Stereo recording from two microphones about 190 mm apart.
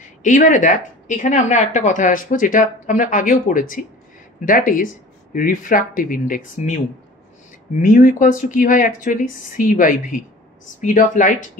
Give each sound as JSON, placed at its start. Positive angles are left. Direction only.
{"t": 0.2, "sound": "speech", "side_deg": 40}
{"t": 7.8, "sound": "speech", "side_deg": 45}